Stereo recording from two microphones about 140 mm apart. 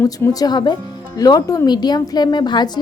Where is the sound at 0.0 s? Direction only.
25° left (ahead or behind).